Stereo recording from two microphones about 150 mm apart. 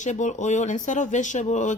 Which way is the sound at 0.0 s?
55° left (ahead or behind).